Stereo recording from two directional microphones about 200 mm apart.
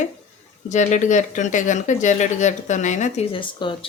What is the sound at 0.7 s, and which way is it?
Speech, 35° left (ahead or behind).